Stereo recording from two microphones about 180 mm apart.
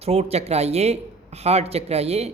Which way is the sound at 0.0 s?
35° right (ahead or behind).